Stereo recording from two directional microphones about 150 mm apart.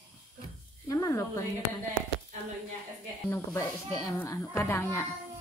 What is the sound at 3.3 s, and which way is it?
A woman's voice, 20° left (ahead or behind).